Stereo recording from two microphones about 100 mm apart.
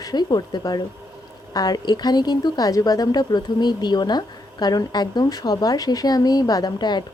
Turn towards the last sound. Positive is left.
turn(degrees=45)  # may be behind; listen again after turning